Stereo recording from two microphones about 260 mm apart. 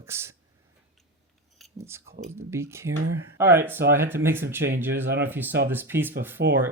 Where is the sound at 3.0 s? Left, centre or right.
Right.